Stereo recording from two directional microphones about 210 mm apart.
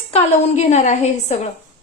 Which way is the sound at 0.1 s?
30° left (ahead or behind).